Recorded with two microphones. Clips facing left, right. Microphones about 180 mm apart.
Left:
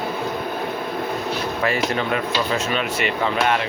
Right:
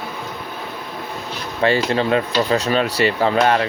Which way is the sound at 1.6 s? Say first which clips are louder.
Right 6 dB; 30° right (ahead or behind).